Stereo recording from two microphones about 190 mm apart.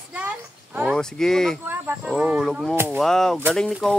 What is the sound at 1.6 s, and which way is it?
Livestock, 10° right (ahead or behind).